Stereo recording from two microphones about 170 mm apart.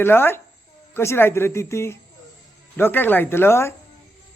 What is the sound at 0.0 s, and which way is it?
Speech, 15° left (ahead or behind).